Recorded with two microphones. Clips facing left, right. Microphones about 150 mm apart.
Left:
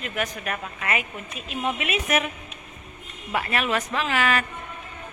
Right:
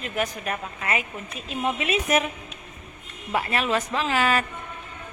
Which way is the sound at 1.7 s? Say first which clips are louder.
Right 3 dB; 30° right (ahead or behind).